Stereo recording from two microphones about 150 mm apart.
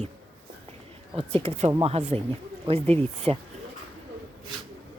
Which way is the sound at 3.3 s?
40° right (ahead or behind).